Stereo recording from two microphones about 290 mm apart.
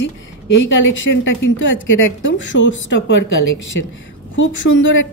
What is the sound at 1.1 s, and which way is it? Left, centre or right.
A woman's voice, left.